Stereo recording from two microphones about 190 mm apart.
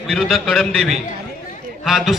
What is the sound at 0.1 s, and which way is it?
A man's voice, centre (ahead or behind).